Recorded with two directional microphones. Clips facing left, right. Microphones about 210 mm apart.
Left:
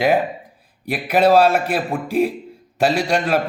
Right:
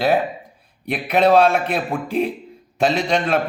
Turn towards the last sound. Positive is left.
turn(degrees=5)  # may be behind; listen again after turning